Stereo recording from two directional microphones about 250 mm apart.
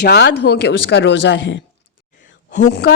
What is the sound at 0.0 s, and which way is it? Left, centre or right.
A woman's voice, left.